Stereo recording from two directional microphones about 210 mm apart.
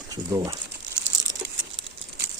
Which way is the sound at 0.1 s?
15° right (ahead or behind).